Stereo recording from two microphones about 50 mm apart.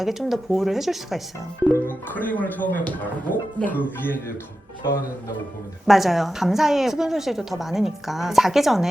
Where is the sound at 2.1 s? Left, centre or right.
Left.